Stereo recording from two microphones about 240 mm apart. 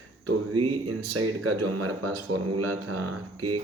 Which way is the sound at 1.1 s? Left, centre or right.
Right.